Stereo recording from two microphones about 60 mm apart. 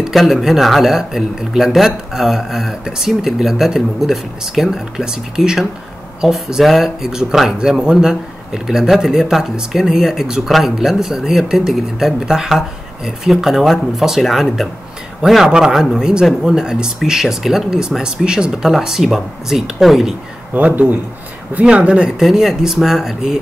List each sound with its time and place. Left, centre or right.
0.0 s speech: centre
20.5 s speech: right
22.2 s speech: centre